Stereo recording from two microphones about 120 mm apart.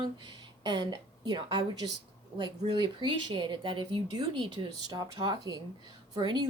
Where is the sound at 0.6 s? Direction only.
35° right (ahead or behind).